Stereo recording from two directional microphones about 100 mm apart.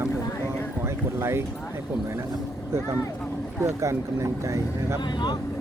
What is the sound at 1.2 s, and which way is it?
Speech, 25° right (ahead or behind).